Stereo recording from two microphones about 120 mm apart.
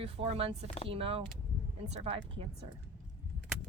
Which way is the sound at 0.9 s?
50° right (ahead or behind).